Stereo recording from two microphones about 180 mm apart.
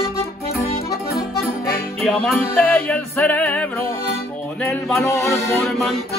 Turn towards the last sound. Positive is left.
turn(degrees=0)  # may be behind; listen again after turning